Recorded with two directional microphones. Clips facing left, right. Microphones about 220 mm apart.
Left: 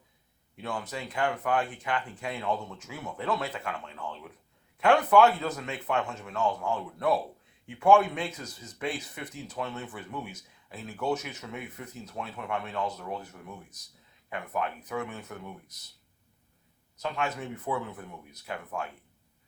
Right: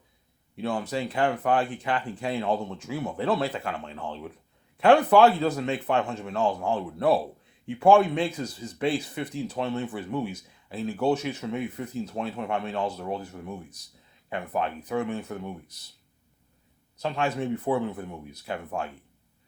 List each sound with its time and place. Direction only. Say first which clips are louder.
0.5 s speech: right 7 dB; 30° right (ahead or behind)
17.0 s speech: right 5 dB; 30° right (ahead or behind)